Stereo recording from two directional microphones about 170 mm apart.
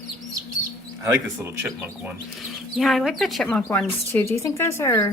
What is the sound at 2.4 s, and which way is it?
Speech, centre (ahead or behind).